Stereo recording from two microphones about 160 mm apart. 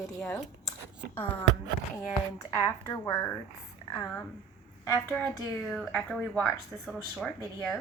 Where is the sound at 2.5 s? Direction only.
20° left (ahead or behind).